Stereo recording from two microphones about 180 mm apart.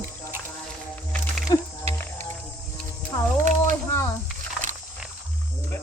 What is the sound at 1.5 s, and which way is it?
Music, 25° left (ahead or behind).